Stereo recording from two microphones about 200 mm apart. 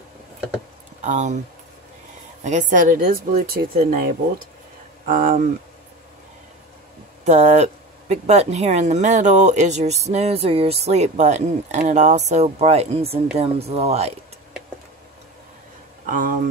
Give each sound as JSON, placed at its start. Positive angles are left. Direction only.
{"t": 1.0, "sound": "speech", "side_deg": -35}
{"t": 2.4, "sound": "speech", "side_deg": -40}
{"t": 7.2, "sound": "speech", "side_deg": -35}
{"t": 16.1, "sound": "speech", "side_deg": -40}